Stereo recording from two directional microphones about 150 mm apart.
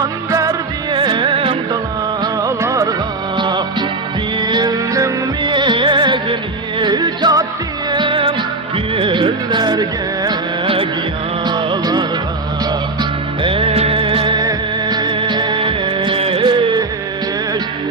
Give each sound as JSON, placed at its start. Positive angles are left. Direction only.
{"t": 0.3, "sound": "music", "side_deg": -20}
{"t": 2.2, "sound": "music", "side_deg": -20}
{"t": 3.3, "sound": "music", "side_deg": -30}